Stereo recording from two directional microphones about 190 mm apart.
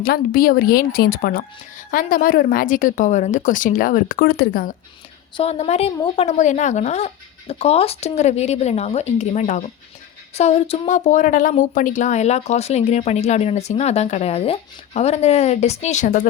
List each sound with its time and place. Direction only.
0.0 s a woman's voice: 50° left (ahead or behind)
5.4 s speech: 35° left (ahead or behind)